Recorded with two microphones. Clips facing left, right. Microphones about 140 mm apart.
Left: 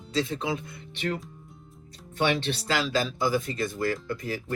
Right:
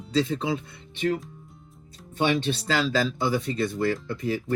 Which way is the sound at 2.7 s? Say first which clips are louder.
Right 2 dB; 35° right (ahead or behind).